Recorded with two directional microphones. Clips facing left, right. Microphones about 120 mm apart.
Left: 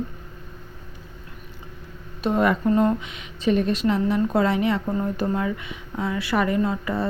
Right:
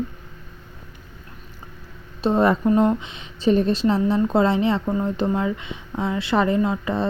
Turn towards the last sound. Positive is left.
turn(degrees=-25)  # may be behind; listen again after turning